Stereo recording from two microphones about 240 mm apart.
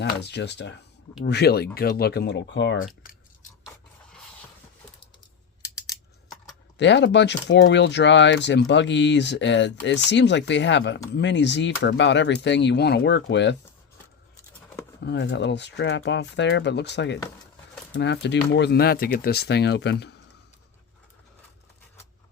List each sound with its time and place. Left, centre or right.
0.0 s speech: left
2.7 s speech: left
6.7 s speech: left
15.0 s speech: left